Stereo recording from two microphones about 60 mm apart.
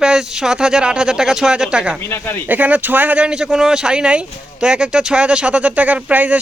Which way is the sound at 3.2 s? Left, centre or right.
Centre.